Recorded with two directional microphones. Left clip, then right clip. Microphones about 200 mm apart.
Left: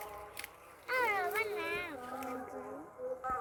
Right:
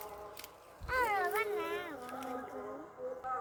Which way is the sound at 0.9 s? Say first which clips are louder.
Even; 35° left (ahead or behind).